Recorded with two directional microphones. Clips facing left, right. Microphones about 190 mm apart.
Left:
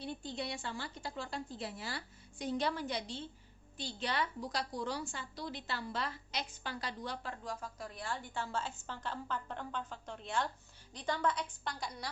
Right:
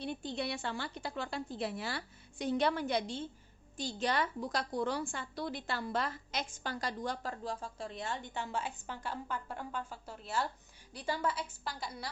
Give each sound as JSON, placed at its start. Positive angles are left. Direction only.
{"t": 0.2, "sound": "a woman's voice", "side_deg": -65}